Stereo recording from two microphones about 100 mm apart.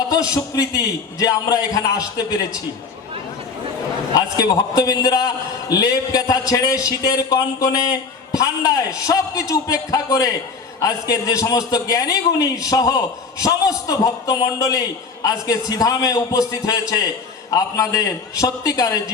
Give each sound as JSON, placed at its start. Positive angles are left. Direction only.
{"t": 0.1, "sound": "a sound", "side_deg": 40}
{"t": 1.2, "sound": "a man's voice", "side_deg": 40}
{"t": 4.1, "sound": "a man's voice", "side_deg": 40}